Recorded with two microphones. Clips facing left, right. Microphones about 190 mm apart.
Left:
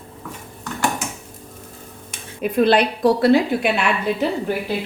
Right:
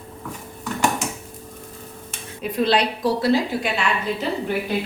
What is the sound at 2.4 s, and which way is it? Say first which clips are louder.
A woman's voice: left 4 dB; 55° left (ahead or behind).